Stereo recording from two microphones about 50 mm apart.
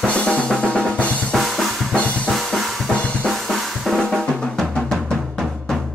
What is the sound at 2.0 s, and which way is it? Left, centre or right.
Drum kit, left.